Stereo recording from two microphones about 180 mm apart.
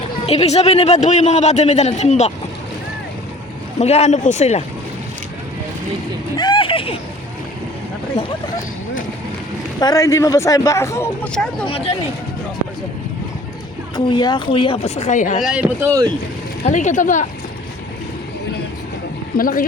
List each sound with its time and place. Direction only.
0.3 s a man's voice: 35° left (ahead or behind)
3.8 s a man's voice: 35° left (ahead or behind)
6.3 s a sound: 25° left (ahead or behind)
9.8 s speech: 20° left (ahead or behind)
11.6 s a man's voice: 30° left (ahead or behind)
13.9 s a man's voice: 25° left (ahead or behind); by 15.4 s 45° left (ahead or behind)
15.4 s speech: 5° right (ahead or behind)
16.6 s speech: 45° left (ahead or behind)
19.4 s speech: 50° left (ahead or behind)